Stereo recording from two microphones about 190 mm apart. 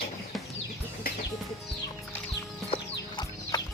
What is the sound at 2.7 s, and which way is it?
Chicken, 25° left (ahead or behind).